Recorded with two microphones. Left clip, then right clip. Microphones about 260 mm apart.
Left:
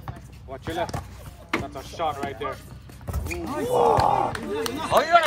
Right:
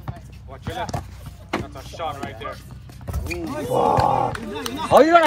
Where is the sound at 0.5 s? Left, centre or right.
Left.